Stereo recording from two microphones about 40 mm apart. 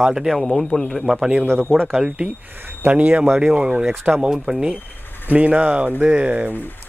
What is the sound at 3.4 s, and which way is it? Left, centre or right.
Speech, right.